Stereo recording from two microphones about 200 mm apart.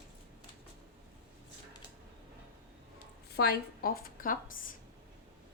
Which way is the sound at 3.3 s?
50° left (ahead or behind).